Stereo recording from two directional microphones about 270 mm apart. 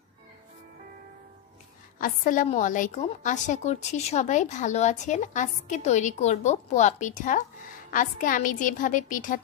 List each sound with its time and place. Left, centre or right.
2.0 s a woman's voice: left